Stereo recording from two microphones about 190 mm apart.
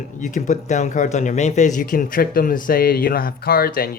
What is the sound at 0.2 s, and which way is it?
Speech, 40° left (ahead or behind).